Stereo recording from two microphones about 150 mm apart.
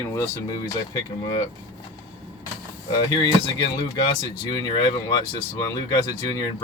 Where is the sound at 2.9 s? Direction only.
25° left (ahead or behind).